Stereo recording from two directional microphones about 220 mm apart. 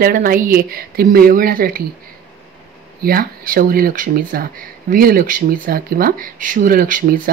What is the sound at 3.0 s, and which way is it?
Speech, 45° right (ahead or behind).